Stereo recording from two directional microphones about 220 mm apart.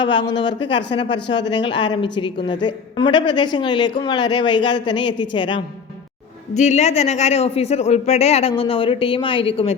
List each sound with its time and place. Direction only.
0.0 s a woman's voice: 20° left (ahead or behind)
6.5 s a woman's voice: 30° left (ahead or behind)